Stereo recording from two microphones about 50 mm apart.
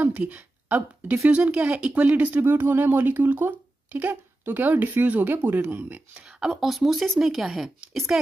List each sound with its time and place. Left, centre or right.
0.2 s a woman's voice: right
2.4 s speech: right
5.3 s speech: right
5.7 s speech: right
6.2 s speech: centre